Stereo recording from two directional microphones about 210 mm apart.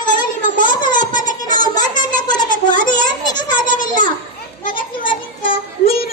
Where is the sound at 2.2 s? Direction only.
20° left (ahead or behind).